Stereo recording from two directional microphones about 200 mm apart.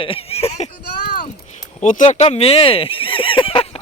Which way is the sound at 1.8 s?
40° left (ahead or behind).